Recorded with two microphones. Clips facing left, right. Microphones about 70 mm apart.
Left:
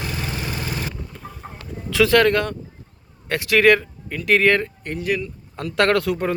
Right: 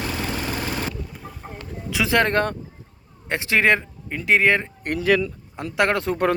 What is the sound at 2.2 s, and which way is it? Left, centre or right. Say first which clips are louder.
Speech: left 2 dB; right.